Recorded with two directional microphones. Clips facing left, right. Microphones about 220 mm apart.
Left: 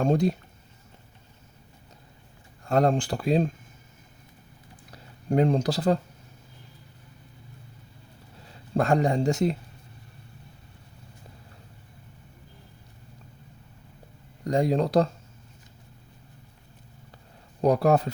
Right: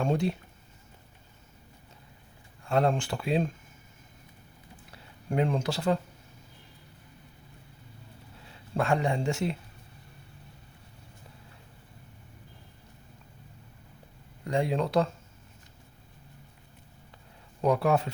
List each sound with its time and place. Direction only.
0.0 s speech: 40° left (ahead or behind)
2.6 s speech: 40° left (ahead or behind)
4.9 s a sound: 35° left (ahead or behind)
8.7 s speech: 40° left (ahead or behind)
14.4 s speech: 40° left (ahead or behind)
17.6 s speech: 35° left (ahead or behind)